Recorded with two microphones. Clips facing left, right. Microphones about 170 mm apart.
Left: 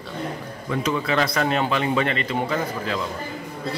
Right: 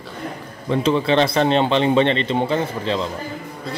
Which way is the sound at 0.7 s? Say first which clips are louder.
Right 6 dB; 30° right (ahead or behind).